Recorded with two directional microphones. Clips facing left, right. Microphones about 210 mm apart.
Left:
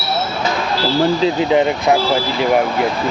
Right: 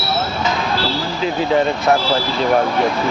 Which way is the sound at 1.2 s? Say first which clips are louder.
Left 3 dB; 20° left (ahead or behind).